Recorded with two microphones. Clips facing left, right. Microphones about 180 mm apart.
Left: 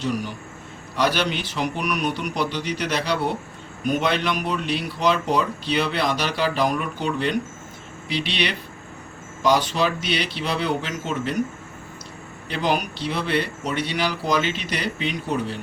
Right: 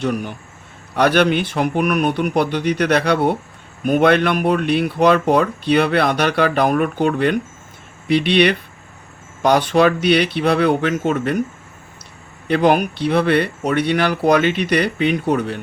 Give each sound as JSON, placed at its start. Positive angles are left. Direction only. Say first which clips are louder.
{"t": 0.0, "sound": "speech", "louder": "right 4 dB", "side_deg": -55}
{"t": 12.5, "sound": "speech", "louder": "right 9 dB", "side_deg": -60}